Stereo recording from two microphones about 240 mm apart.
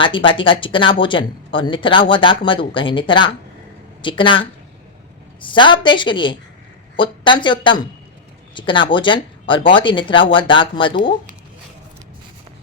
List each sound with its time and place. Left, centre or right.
0.0 s speech: left